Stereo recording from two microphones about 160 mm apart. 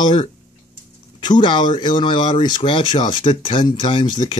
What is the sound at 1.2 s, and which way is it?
Speech, 30° left (ahead or behind).